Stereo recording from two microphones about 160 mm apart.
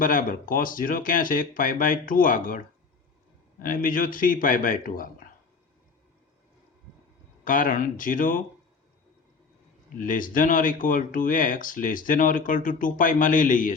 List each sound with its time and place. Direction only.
0.0 s speech: 60° left (ahead or behind)
3.6 s speech: 60° left (ahead or behind)
7.4 s speech: 55° left (ahead or behind)
10.0 s speech: 55° left (ahead or behind)